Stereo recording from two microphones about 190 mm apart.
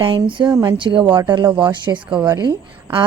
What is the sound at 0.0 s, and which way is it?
A woman's voice, 25° right (ahead or behind).